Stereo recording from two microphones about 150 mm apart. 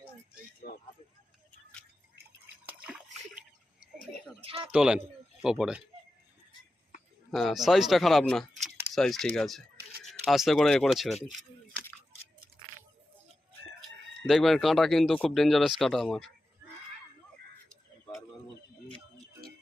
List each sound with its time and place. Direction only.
0.6 s a sound: 90° left
2.6 s splash: 5° right (ahead or behind)
4.4 s a sound: 40° right (ahead or behind)
4.7 s a man's voice: 5° right (ahead or behind)
7.3 s speech: centre (ahead or behind)
14.3 s speech: centre (ahead or behind)